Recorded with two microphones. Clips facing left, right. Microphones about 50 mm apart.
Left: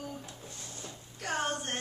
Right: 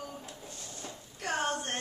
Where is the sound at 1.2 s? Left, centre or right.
Centre.